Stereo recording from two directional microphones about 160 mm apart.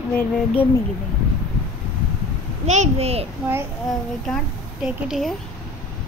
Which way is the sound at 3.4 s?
5° right (ahead or behind).